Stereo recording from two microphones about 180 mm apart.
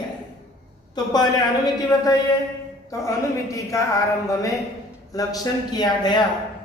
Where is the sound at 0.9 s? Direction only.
25° left (ahead or behind).